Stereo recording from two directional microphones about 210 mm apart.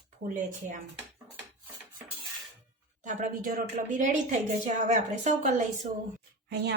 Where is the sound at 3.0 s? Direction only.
40° right (ahead or behind).